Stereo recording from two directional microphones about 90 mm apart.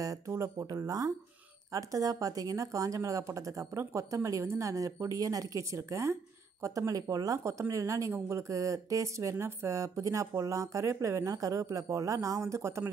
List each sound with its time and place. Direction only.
0.0 s a woman's voice: 35° right (ahead or behind)